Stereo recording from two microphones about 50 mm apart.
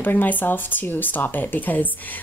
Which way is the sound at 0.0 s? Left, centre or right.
Left.